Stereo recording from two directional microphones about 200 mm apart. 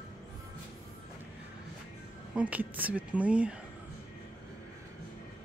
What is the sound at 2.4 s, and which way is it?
Speech, 5° right (ahead or behind).